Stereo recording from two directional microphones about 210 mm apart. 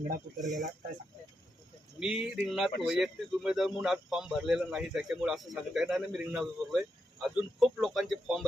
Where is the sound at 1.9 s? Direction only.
5° right (ahead or behind).